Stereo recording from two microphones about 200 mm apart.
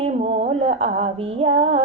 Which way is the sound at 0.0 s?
30° right (ahead or behind).